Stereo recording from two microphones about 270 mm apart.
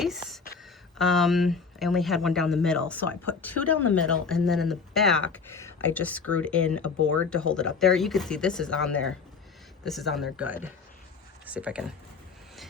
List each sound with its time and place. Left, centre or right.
0.0 s a sound: centre
0.9 s speech: centre
3.6 s speech: left
4.3 s speech: centre